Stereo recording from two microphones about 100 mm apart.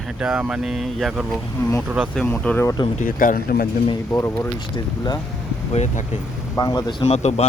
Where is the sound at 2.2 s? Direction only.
15° left (ahead or behind).